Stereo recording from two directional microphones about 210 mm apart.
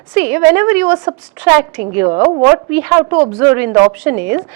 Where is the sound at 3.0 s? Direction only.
25° right (ahead or behind).